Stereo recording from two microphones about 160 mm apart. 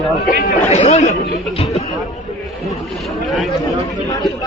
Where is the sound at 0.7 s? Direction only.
45° left (ahead or behind).